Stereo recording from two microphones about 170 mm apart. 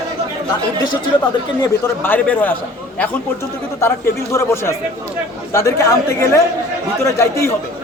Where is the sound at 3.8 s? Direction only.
15° left (ahead or behind).